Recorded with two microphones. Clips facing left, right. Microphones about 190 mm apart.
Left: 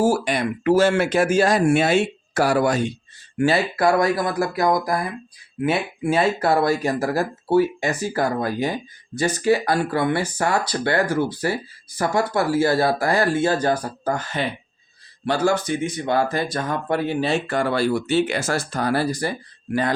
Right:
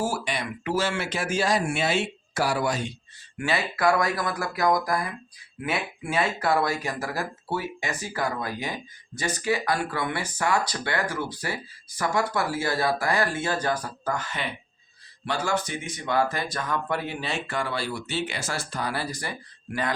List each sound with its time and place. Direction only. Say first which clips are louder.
0.0 s speech: left 9 dB; 45° left (ahead or behind)
3.3 s speech: left 8 dB; 35° left (ahead or behind)
17.4 s speech: left 9 dB; 45° left (ahead or behind)